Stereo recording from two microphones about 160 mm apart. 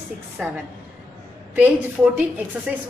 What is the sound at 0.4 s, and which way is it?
Speech, 5° right (ahead or behind).